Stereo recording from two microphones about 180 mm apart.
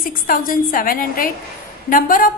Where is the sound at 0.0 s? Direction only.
50° left (ahead or behind).